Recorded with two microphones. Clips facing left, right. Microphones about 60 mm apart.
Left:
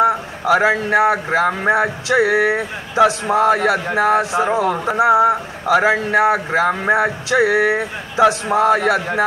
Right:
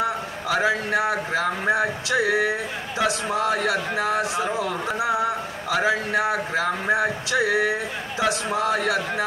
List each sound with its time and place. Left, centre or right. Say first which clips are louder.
0.0 s a man's voice: left 9 dB; left
4.5 s speech: left 8 dB; left
4.8 s a man's voice: left 11 dB; left